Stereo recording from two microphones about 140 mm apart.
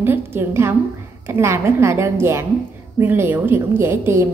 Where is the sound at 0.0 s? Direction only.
15° right (ahead or behind).